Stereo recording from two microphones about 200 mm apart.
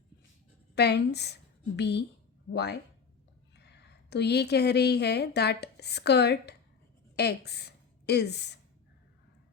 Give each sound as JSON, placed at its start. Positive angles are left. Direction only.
{"t": 0.8, "sound": "a woman's voice", "side_deg": 55}